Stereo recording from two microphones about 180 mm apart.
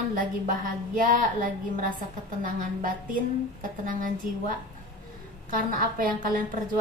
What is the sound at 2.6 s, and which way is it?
A woman's voice, 50° right (ahead or behind).